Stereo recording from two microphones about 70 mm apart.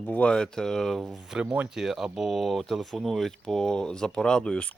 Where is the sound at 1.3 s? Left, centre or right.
Centre.